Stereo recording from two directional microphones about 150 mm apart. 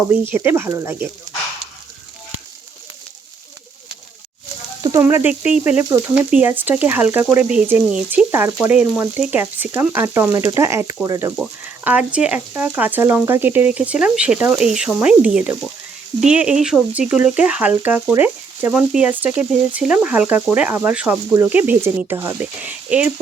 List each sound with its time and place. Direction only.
0.1 s speech: 15° right (ahead or behind)
4.8 s speech: 20° right (ahead or behind)
11.8 s speech: 10° right (ahead or behind)